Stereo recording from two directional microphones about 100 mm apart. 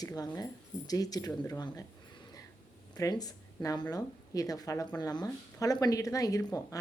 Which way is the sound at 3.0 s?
40° left (ahead or behind).